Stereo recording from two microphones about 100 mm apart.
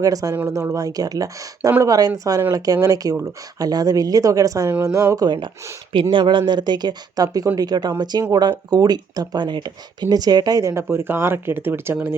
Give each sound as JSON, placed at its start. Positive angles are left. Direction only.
{"t": 0.0, "sound": "speech", "side_deg": -35}
{"t": 5.9, "sound": "speech", "side_deg": -55}